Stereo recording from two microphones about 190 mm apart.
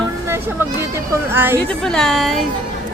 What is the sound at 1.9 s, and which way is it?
Speech, centre (ahead or behind).